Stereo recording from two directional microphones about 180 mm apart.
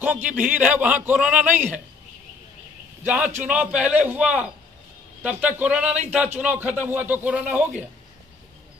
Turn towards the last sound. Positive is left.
turn(degrees=-5)  # may be behind; listen again after turning